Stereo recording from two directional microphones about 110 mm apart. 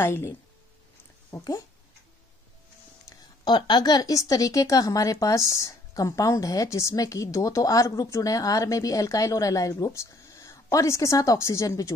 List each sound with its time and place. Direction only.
0.0 s a woman's voice: 25° left (ahead or behind)
3.4 s a woman's voice: 45° left (ahead or behind)